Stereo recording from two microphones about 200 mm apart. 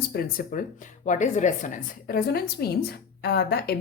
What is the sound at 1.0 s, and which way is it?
A woman's voice, 35° left (ahead or behind).